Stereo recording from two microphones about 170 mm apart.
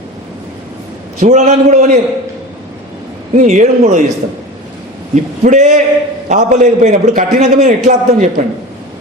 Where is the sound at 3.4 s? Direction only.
45° right (ahead or behind).